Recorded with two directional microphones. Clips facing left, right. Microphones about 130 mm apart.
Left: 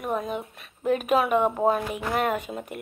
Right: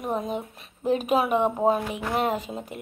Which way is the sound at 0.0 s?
30° right (ahead or behind).